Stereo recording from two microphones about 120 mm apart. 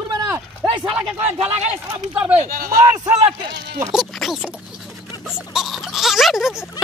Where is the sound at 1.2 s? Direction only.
60° right (ahead or behind).